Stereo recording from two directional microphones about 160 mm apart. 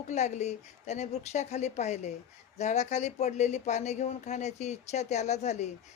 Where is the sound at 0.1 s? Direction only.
45° left (ahead or behind).